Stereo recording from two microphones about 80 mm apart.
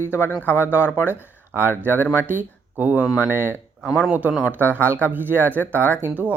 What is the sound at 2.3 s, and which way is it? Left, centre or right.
Speech, right.